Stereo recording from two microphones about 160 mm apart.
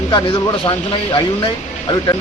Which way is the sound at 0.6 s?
30° left (ahead or behind).